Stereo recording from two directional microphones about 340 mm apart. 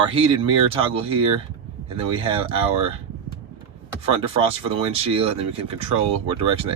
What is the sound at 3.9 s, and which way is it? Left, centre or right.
Speech, centre.